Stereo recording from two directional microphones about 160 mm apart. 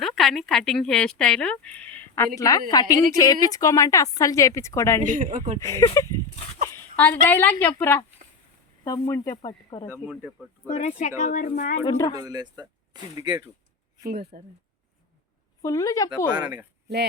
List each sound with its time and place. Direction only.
0.0 s a woman's voice: centre (ahead or behind); by 5.0 s 20° left (ahead or behind)
5.0 s a man's voice: 55° right (ahead or behind)
5.5 s a woman's voice: 20° left (ahead or behind)
9.9 s speech: 5° right (ahead or behind)
10.7 s speech: 45° left (ahead or behind)
11.9 s a woman's voice: 20° left (ahead or behind)
12.1 s speech: 25° right (ahead or behind)
14.1 s speech: 85° right
15.6 s a woman's voice: 20° left (ahead or behind)
16.0 s speech: 25° right (ahead or behind)